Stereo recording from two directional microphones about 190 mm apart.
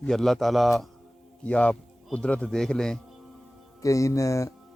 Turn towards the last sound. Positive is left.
turn(degrees=15)  # may be behind; listen again after turning